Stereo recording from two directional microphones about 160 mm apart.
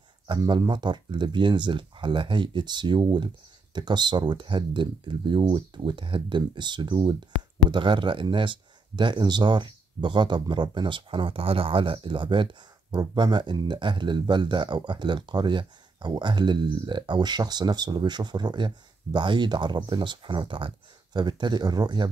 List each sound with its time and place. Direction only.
0.3 s speech: 25° right (ahead or behind)